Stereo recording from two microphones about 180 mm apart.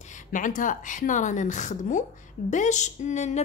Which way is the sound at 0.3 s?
45° left (ahead or behind).